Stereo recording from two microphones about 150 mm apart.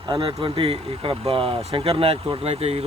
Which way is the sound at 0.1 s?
35° right (ahead or behind).